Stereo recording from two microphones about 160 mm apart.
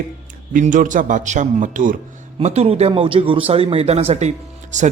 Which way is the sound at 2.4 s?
45° right (ahead or behind).